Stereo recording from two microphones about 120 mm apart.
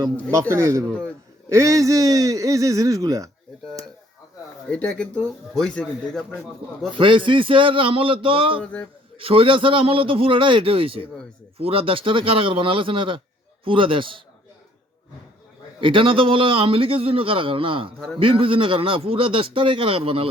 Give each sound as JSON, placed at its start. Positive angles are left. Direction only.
{"t": 0.3, "sound": "a man's voice", "side_deg": -25}
{"t": 4.7, "sound": "a man's voice", "side_deg": 10}
{"t": 6.9, "sound": "a man's voice", "side_deg": -45}
{"t": 8.6, "sound": "a man's voice", "side_deg": 10}
{"t": 9.1, "sound": "a man's voice", "side_deg": -50}
{"t": 15.8, "sound": "a man's voice", "side_deg": -45}